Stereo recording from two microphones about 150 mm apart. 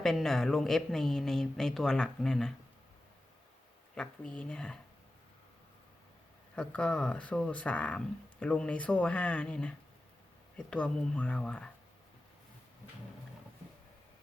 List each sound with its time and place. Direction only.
0.0 s a woman's voice: centre (ahead or behind)
3.9 s speech: 5° left (ahead or behind)
6.6 s speech: 5° left (ahead or behind)